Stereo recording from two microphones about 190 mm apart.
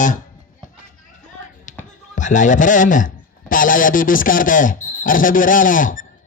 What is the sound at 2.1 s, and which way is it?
A man's voice, 40° left (ahead or behind).